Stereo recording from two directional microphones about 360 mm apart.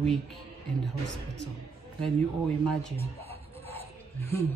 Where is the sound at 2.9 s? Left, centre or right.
Centre.